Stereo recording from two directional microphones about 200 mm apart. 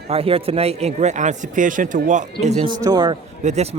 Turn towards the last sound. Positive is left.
turn(degrees=-35)  # may be behind; listen again after turning